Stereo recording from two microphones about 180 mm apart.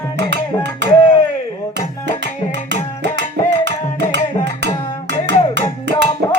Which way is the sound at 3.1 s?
75° right (ahead or behind).